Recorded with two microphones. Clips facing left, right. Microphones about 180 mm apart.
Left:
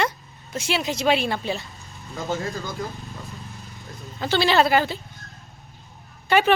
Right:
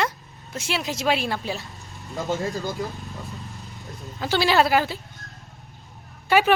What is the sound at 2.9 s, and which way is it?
Vehicle, centre (ahead or behind).